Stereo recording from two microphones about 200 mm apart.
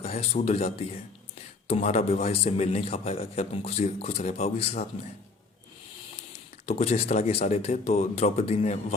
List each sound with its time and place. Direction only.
0.0 s a man's voice: 30° left (ahead or behind)
6.7 s a man's voice: 30° left (ahead or behind)